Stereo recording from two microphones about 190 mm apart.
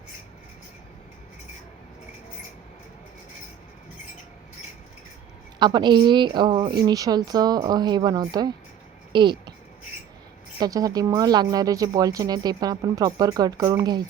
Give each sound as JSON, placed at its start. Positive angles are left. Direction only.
{"t": 5.5, "sound": "speech", "side_deg": -25}
{"t": 10.6, "sound": "speech", "side_deg": -20}